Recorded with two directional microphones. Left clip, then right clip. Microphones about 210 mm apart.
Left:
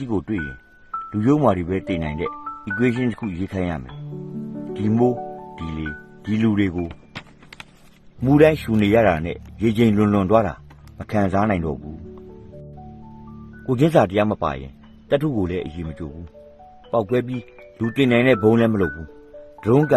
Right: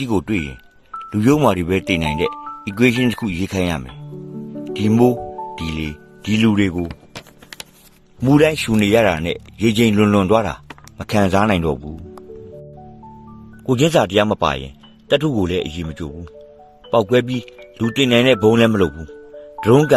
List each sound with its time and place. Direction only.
0.1 s speech: 20° right (ahead or behind)
8.2 s speech: 15° right (ahead or behind)
13.7 s speech: 10° right (ahead or behind)